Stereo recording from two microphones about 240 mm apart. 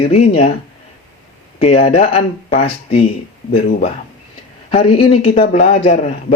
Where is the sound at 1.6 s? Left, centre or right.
Left.